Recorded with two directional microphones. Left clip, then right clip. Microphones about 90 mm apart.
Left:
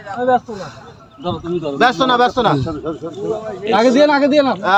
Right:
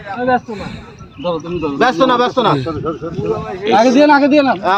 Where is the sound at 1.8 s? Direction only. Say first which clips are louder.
Right 1 dB; 65° left (ahead or behind).